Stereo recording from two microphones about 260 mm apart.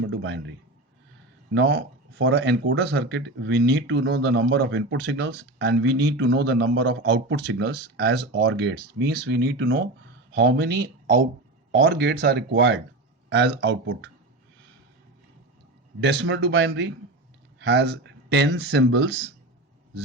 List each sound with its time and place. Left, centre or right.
0.0 s speech: right
1.5 s speech: right
16.0 s speech: right